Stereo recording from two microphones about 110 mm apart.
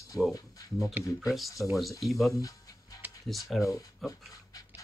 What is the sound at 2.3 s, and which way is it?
Music, 30° left (ahead or behind).